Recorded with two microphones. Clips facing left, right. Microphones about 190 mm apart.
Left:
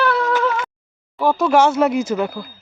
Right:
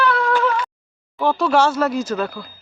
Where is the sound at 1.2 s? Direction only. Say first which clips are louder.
Left 2 dB; 15° left (ahead or behind).